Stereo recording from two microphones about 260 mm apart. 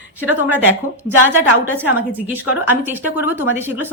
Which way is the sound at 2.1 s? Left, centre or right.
Centre.